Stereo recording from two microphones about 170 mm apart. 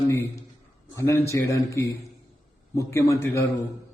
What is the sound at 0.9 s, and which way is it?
A man's voice, 15° left (ahead or behind).